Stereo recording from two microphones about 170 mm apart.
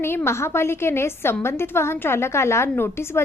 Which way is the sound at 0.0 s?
15° left (ahead or behind).